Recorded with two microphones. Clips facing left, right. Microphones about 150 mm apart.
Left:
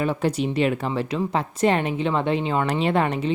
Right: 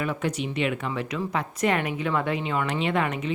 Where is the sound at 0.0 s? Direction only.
30° left (ahead or behind).